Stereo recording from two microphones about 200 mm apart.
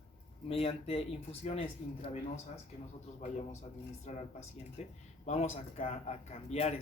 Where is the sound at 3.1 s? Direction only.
35° left (ahead or behind).